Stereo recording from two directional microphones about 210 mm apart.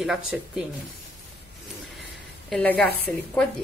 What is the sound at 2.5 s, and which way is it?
Speech, 5° left (ahead or behind).